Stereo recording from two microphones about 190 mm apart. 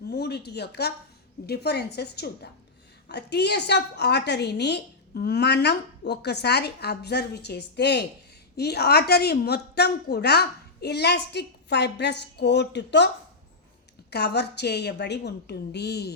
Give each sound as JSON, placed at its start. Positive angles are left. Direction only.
{"t": 0.1, "sound": "a woman's voice", "side_deg": 60}
{"t": 14.1, "sound": "a woman's voice", "side_deg": 60}